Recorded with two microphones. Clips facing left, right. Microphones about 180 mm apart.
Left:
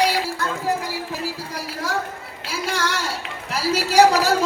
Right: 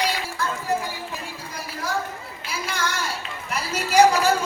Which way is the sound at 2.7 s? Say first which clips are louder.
Left 2 dB; 85° left.